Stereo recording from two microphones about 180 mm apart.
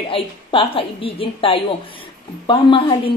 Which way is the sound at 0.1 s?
30° left (ahead or behind).